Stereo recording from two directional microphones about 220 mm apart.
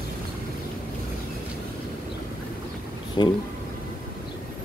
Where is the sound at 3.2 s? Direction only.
20° left (ahead or behind).